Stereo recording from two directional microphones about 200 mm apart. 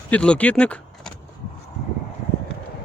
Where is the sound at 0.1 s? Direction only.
5° left (ahead or behind).